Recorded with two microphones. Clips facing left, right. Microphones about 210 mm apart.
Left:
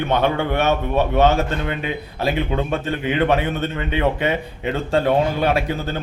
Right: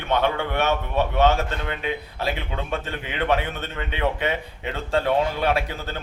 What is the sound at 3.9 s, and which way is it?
Speech, 45° left (ahead or behind).